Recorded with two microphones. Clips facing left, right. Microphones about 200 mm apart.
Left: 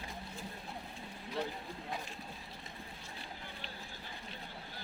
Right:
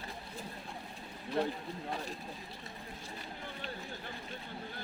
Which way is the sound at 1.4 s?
55° right (ahead or behind).